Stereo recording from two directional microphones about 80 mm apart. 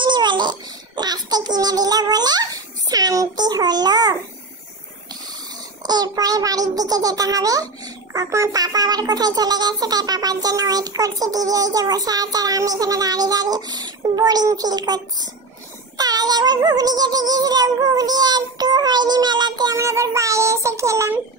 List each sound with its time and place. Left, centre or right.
0.0 s a sound: right
5.8 s a child's voice: right
16.0 s music: right
19.8 s child singing: right